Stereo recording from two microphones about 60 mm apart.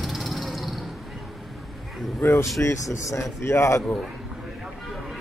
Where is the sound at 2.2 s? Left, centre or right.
Left.